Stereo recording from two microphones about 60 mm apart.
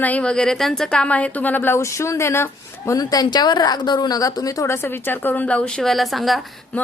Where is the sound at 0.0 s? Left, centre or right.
Left; by 0.9 s centre.